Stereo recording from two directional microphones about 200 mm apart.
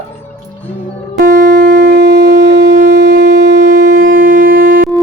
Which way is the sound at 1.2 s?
40° right (ahead or behind).